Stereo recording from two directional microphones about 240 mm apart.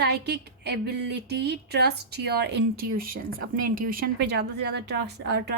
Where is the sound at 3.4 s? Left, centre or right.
Right.